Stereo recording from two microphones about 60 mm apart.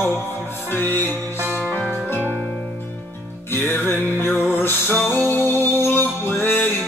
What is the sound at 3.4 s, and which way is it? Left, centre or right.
Music, left.